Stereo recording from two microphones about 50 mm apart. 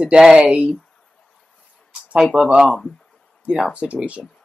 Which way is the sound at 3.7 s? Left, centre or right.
Right.